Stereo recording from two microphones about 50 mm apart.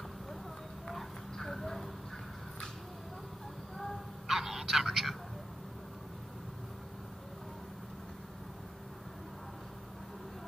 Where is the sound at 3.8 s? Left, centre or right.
Centre.